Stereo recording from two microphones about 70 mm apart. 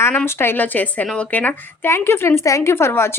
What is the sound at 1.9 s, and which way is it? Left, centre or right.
A woman's voice, left.